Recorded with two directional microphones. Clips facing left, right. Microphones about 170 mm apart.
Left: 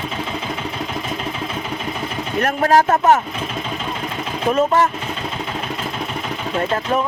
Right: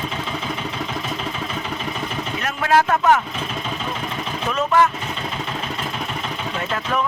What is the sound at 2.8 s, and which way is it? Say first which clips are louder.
Speech: left 3 dB; 25° left (ahead or behind).